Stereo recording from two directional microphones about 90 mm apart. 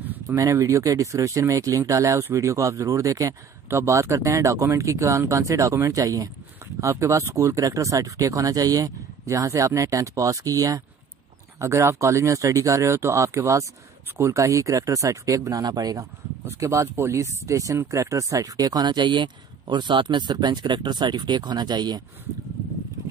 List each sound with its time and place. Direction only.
0.3 s speech: 40° right (ahead or behind)
16.4 s speech: 35° right (ahead or behind)
18.6 s speech: 50° right (ahead or behind)